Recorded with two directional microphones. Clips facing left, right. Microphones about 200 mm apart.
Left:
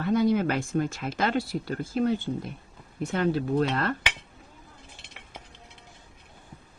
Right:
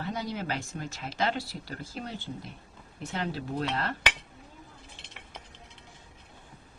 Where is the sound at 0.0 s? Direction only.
55° left (ahead or behind).